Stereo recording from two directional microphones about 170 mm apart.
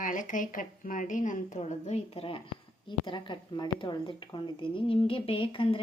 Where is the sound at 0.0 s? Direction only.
50° left (ahead or behind).